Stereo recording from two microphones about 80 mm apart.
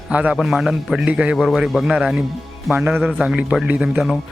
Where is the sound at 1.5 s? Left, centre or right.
Centre.